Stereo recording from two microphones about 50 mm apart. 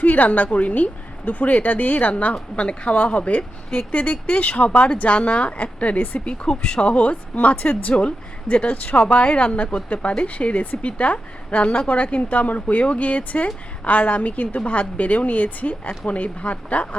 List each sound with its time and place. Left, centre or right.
0.0 s a woman's voice: left; by 6.9 s centre
6.9 s a woman's voice: left